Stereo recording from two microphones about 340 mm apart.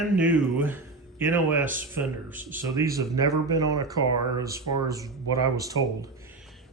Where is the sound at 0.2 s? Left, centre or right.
Centre.